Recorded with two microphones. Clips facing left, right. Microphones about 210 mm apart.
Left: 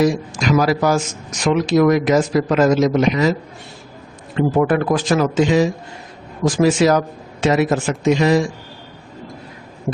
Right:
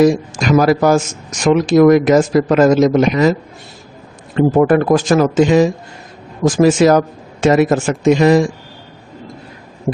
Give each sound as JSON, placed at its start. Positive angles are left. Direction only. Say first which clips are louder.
{"t": 0.0, "sound": "a man's voice", "louder": "right 5 dB", "side_deg": -50}
{"t": 4.4, "sound": "a man's voice", "louder": "right 5 dB", "side_deg": -45}